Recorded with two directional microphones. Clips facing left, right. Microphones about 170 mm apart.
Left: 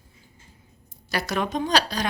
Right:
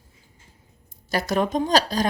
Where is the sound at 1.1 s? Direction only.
45° right (ahead or behind).